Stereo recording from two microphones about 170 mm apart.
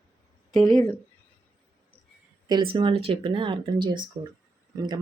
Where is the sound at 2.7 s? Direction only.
30° right (ahead or behind).